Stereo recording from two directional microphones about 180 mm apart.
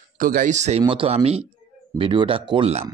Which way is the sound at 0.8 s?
30° right (ahead or behind).